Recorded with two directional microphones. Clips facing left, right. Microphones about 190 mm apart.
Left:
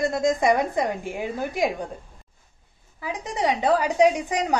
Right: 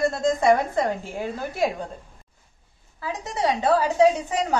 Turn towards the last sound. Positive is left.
turn(degrees=15)  # may be behind; listen again after turning